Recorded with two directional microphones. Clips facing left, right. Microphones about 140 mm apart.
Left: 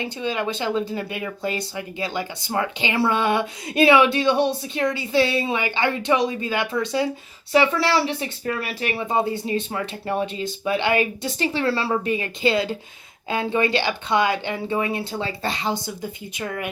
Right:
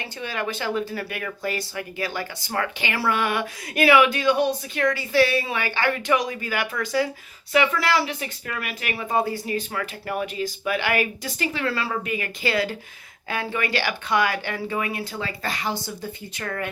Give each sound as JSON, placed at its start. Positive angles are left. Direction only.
{"t": 0.0, "sound": "speech", "side_deg": 20}